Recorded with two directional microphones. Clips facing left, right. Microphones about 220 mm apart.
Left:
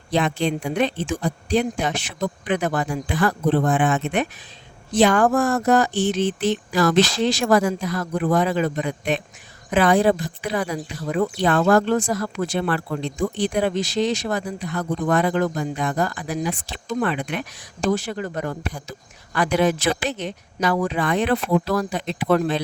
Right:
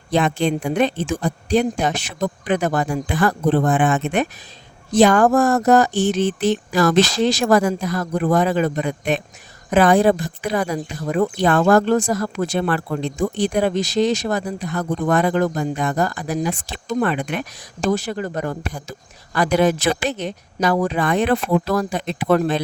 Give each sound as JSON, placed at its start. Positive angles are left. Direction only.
{"t": 0.1, "sound": "speech", "side_deg": -45}